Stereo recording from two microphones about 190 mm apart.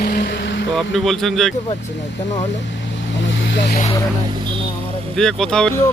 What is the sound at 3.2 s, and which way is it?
Vehicle, 75° left (ahead or behind).